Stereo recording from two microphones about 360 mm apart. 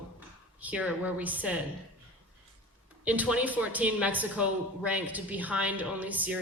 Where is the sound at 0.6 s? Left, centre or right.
Centre.